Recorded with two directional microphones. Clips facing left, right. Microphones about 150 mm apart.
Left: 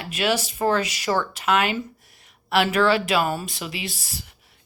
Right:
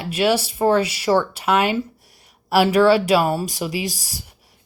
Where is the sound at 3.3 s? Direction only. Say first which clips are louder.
Right 5 dB; 35° right (ahead or behind).